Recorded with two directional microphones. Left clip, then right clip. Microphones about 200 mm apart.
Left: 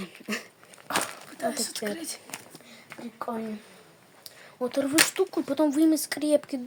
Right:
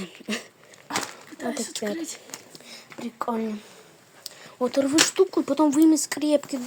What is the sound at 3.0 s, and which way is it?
Speech, 35° right (ahead or behind).